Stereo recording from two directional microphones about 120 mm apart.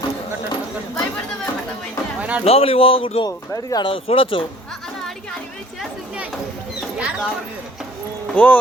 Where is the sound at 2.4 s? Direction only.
55° left (ahead or behind).